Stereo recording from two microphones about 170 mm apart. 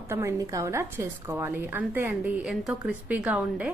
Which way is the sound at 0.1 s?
15° right (ahead or behind).